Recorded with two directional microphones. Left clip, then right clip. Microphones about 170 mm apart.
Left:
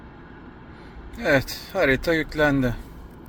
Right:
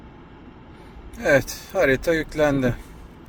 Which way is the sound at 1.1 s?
20° right (ahead or behind).